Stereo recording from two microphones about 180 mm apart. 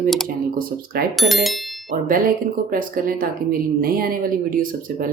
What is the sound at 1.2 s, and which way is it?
Bicycle bell, centre (ahead or behind).